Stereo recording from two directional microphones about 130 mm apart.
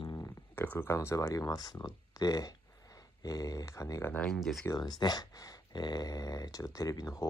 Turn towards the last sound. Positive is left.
turn(degrees=25)  # may be behind; listen again after turning